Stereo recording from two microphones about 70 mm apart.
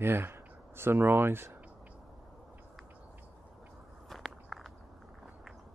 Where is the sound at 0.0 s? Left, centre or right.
Right.